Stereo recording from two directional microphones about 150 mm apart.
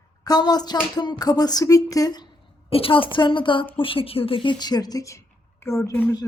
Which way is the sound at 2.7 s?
35° left (ahead or behind).